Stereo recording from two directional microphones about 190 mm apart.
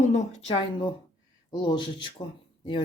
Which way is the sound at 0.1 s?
40° left (ahead or behind).